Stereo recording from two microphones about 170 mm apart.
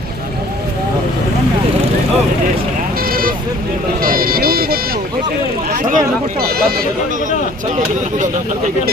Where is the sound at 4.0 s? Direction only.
60° right (ahead or behind).